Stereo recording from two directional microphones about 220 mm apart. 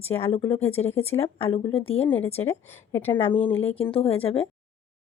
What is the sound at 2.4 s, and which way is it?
Speech, 10° left (ahead or behind).